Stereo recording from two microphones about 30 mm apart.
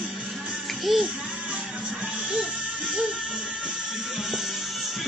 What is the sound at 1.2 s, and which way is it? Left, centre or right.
Music, right.